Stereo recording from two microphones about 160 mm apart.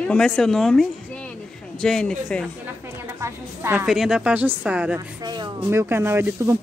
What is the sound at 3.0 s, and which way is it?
Music, 15° right (ahead or behind).